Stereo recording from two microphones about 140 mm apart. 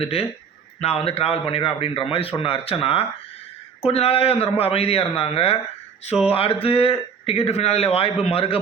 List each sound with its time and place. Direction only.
0.0 s a man's voice: 45° left (ahead or behind)